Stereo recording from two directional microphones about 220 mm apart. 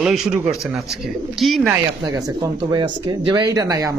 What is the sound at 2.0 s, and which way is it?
Speech, 15° right (ahead or behind).